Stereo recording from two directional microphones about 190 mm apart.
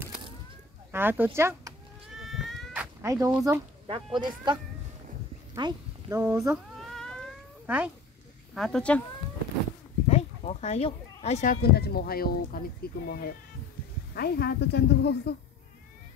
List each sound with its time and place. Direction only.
0.9 s speech: 10° right (ahead or behind)
2.1 s goat: centre (ahead or behind)
3.1 s speech: 15° right (ahead or behind)
5.5 s a sound: 20° right (ahead or behind)
6.3 s speech: 15° right (ahead or behind)
6.8 s cat: 5° left (ahead or behind)
7.6 s speech: 5° right (ahead or behind)
10.0 s a sound: 35° left (ahead or behind)
11.2 s speech: 35° left (ahead or behind)
11.7 s a woman's voice: 55° left (ahead or behind)